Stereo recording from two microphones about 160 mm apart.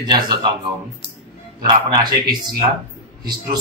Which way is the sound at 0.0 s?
25° right (ahead or behind).